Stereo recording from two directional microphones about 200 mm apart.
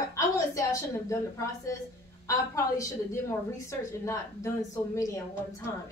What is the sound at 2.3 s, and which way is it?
Speech, 15° left (ahead or behind).